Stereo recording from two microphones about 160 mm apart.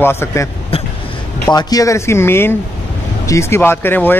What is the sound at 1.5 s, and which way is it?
Speech, 25° left (ahead or behind).